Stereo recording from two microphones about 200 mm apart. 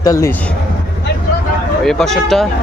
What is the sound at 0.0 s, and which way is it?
Speech, 15° left (ahead or behind).